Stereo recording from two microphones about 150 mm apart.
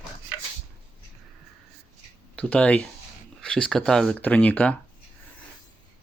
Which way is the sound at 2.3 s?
10° left (ahead or behind).